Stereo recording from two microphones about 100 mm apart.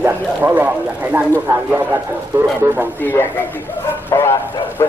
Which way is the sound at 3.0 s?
20° left (ahead or behind).